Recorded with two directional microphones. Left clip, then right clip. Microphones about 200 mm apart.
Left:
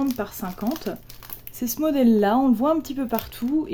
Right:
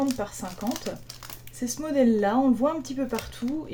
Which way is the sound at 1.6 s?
50° left (ahead or behind).